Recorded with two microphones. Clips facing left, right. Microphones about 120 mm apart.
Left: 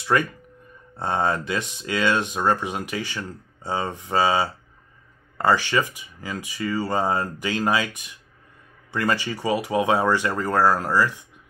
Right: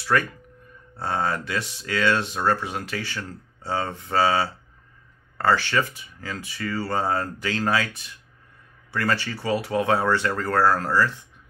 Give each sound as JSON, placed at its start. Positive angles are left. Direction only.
{"t": 0.1, "sound": "speech", "side_deg": 20}